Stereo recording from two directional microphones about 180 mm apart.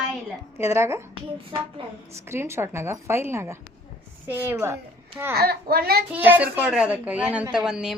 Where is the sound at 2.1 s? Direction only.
15° right (ahead or behind).